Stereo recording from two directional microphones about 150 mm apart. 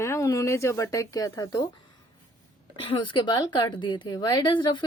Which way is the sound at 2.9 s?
30° left (ahead or behind).